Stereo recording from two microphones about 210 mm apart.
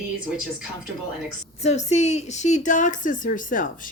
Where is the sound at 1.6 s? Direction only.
30° left (ahead or behind).